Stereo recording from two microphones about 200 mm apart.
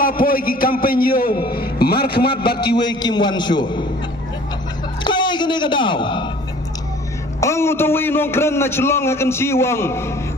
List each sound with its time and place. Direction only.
0.0 s a man's voice: 45° left (ahead or behind)
2.5 s a man's voice: 20° left (ahead or behind)
5.0 s a man's voice: 20° left (ahead or behind)
7.4 s a man's voice: 15° left (ahead or behind)